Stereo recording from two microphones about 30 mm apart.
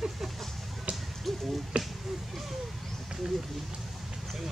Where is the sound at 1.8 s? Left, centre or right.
Right.